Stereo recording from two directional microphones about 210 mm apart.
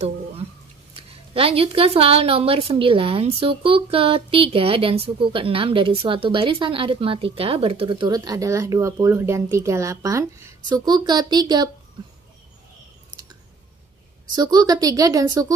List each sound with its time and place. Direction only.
0.9 s a woman's voice: 25° right (ahead or behind)
14.3 s speech: 20° right (ahead or behind)